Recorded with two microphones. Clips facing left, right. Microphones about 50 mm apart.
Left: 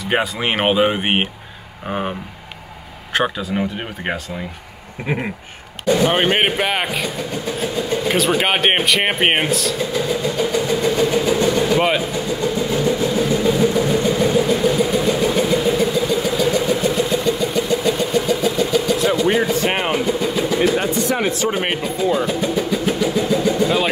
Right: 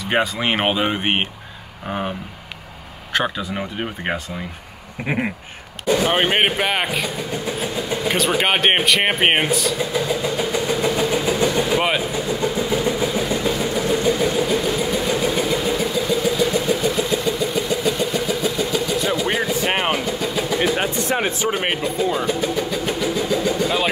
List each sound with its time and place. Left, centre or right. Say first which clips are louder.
0.1 s speech: even; centre
5.0 s a sound: even; centre
5.9 s speech: left 2 dB; centre
11.1 s vehicle: left 2 dB; centre
13.4 s vehicle: left 5 dB; centre
20.1 s vehicle: left 3 dB; centre
20.8 s a sound: left 2 dB; right
21.5 s speech: left 1 dB; centre